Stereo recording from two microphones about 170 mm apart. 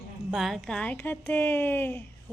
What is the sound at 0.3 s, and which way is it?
Speech, centre (ahead or behind).